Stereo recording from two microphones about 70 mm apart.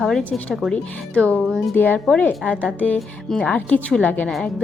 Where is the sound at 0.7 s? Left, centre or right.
Centre.